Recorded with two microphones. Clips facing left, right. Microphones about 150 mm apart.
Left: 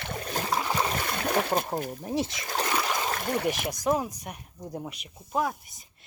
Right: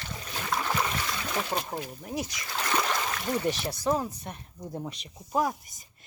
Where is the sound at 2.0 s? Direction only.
25° left (ahead or behind).